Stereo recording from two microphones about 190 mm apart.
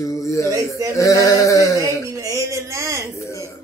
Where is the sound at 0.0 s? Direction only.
15° left (ahead or behind).